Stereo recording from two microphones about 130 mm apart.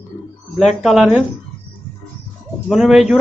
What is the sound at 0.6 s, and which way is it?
Speech, centre (ahead or behind).